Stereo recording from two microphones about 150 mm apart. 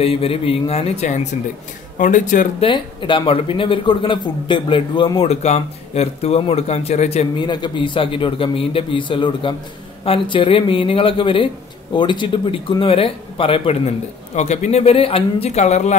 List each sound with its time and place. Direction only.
0.0 s speech: 40° left (ahead or behind); by 2.4 s 60° left (ahead or behind)
2.6 s a man's voice: 35° left (ahead or behind)
7.3 s a man's voice: 30° left (ahead or behind)
14.3 s speech: 50° left (ahead or behind)